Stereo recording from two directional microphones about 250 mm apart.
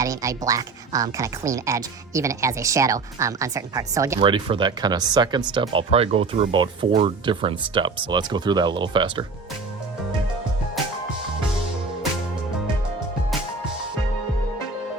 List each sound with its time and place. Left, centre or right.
0.0 s a woman's voice: centre